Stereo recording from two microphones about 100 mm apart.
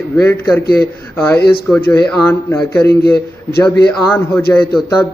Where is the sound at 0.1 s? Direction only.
20° left (ahead or behind).